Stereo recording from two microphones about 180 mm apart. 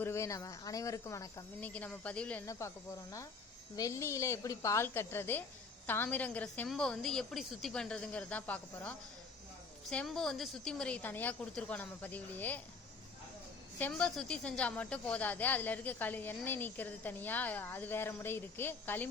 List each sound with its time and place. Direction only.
0.0 s speech: 15° left (ahead or behind)
1.7 s speech: 5° left (ahead or behind)
13.7 s speech: 5° left (ahead or behind)